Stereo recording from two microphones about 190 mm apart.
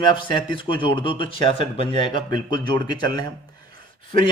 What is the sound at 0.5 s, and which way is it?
Speech, 25° left (ahead or behind).